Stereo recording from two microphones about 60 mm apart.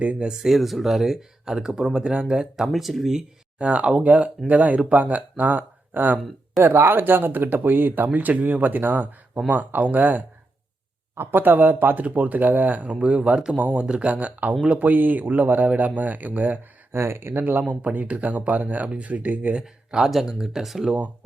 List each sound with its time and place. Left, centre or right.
0.0 s speech: right
0.3 s speech: centre
3.6 s speech: right
6.6 s speech: right
16.9 s speech: right
20.1 s speech: centre